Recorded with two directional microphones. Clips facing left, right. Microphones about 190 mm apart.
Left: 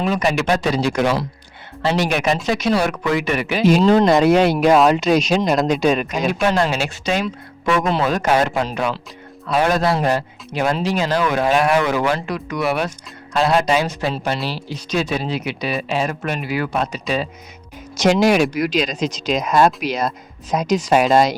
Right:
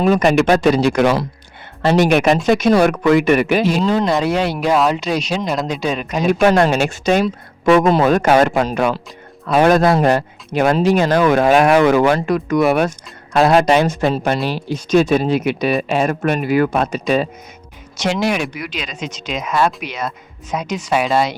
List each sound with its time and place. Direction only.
0.0 s speech: 50° right (ahead or behind)
1.8 s speech: 50° right (ahead or behind)
3.8 s speech: 55° left (ahead or behind)
6.4 s speech: 50° right (ahead or behind)
17.9 s speech: 40° left (ahead or behind)